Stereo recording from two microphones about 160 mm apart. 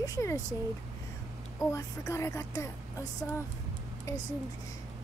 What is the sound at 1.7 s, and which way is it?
Speech, 20° left (ahead or behind).